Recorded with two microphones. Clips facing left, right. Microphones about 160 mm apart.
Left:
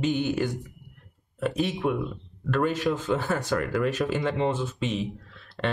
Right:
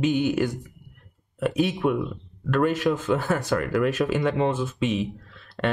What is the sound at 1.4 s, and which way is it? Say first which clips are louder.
Speech: right 3 dB; 5° right (ahead or behind).